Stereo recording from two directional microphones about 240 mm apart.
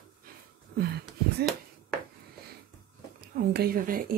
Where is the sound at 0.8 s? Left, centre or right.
Right.